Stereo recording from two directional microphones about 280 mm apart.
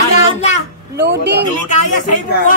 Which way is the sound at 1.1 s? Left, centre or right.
Right.